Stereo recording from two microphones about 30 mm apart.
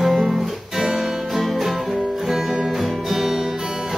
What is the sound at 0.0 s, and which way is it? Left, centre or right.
Music, centre.